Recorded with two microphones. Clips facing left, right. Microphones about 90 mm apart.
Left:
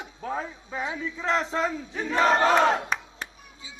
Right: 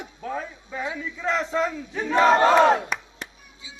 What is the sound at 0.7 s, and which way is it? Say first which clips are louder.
Speech: right 1 dB; 20° left (ahead or behind).